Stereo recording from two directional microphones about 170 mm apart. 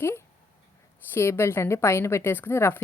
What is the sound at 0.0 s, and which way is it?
Speech, 15° left (ahead or behind).